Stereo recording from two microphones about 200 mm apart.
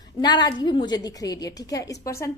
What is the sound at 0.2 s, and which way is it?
A woman's voice, 20° left (ahead or behind).